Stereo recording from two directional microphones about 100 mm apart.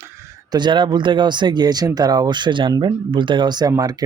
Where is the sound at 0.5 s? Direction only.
50° right (ahead or behind).